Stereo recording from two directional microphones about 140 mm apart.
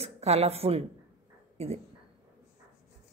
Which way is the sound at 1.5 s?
50° right (ahead or behind).